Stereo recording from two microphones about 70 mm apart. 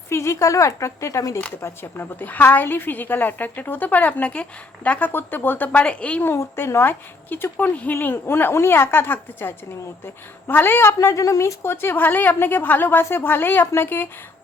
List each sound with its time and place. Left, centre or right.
0.1 s speech: left
1.6 s a woman's voice: left
6.2 s a woman's voice: left
7.9 s a woman's voice: left